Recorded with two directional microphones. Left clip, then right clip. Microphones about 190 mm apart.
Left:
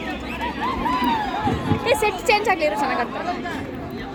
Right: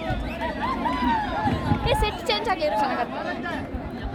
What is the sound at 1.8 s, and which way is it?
A woman's voice, 40° left (ahead or behind).